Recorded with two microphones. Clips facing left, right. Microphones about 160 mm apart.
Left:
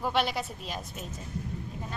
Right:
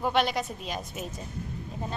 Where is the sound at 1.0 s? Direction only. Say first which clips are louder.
Right 4 dB; 10° right (ahead or behind).